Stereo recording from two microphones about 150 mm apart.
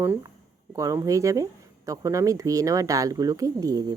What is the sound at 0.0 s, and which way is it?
Speech, 15° right (ahead or behind).